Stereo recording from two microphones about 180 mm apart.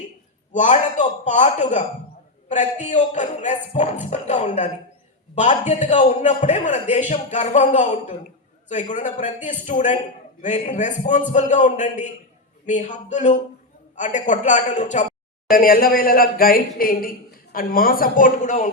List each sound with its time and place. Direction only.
0.5 s a man's voice: 40° left (ahead or behind)